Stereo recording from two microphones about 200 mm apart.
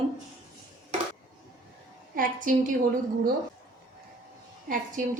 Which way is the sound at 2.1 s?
45° right (ahead or behind).